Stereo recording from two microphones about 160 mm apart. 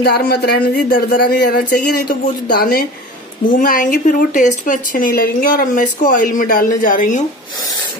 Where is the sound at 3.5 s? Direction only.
55° left (ahead or behind).